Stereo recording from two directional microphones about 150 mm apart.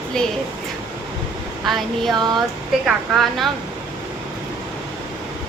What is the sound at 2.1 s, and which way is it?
Speech, 30° right (ahead or behind).